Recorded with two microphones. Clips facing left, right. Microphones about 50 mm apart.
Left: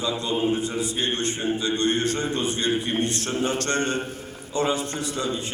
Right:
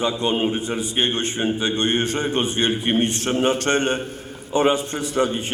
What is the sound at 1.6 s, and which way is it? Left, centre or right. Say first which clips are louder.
A man's voice: right 1 dB; right.